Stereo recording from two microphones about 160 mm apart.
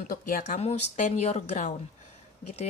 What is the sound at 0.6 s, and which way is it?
Speech, 45° left (ahead or behind).